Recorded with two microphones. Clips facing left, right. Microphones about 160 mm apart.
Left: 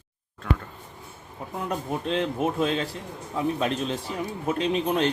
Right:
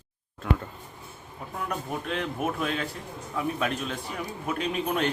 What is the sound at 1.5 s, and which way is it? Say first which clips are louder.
A man's voice: left 3 dB; 25° left (ahead or behind).